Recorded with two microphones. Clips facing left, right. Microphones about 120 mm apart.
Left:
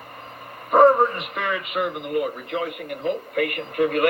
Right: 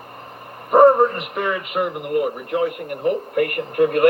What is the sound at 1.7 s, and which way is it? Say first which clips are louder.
Speech: right 3 dB; 50° right (ahead or behind).